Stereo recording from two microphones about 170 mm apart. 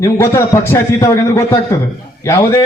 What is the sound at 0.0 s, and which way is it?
A man's voice, 15° left (ahead or behind).